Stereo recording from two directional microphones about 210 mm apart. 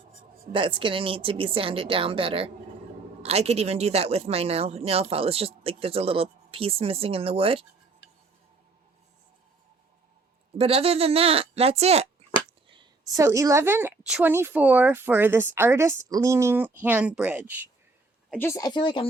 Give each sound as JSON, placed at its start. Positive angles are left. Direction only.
{"t": 0.5, "sound": "speech", "side_deg": -25}
{"t": 10.6, "sound": "speech", "side_deg": -30}
{"t": 12.6, "sound": "a sound", "side_deg": -25}
{"t": 13.1, "sound": "speech", "side_deg": -15}
{"t": 18.3, "sound": "a woman's voice", "side_deg": 10}